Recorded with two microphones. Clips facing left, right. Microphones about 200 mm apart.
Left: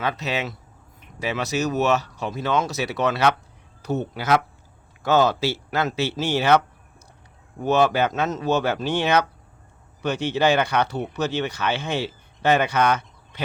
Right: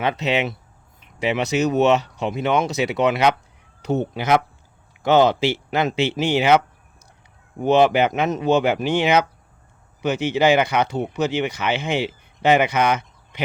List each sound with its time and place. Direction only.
0.0 s speech: 20° right (ahead or behind)
7.6 s speech: 15° right (ahead or behind)